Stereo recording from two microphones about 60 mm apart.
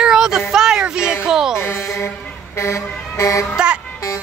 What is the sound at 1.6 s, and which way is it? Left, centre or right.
Speech, left.